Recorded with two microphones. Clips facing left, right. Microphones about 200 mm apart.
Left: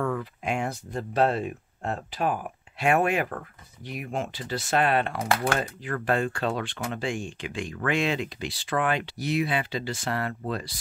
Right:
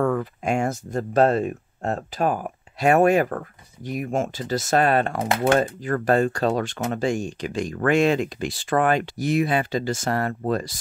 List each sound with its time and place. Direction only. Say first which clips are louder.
0.0 s speech: right 6 dB; 45° right (ahead or behind)
5.2 s speech: right 6 dB; 20° right (ahead or behind)
5.6 s speech: right 7 dB; 45° right (ahead or behind)